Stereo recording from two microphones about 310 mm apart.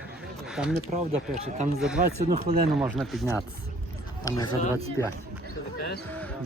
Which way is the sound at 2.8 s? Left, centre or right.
Centre.